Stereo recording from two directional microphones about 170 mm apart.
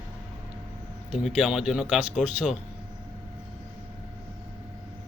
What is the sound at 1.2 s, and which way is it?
Speech, 5° right (ahead or behind).